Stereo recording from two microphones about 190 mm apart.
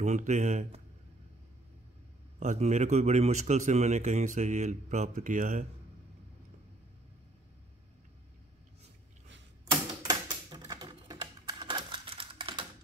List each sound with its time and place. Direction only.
0.0 s a man's voice: 40° right (ahead or behind)
2.4 s a man's voice: 40° right (ahead or behind)
9.7 s typewriter: 25° right (ahead or behind)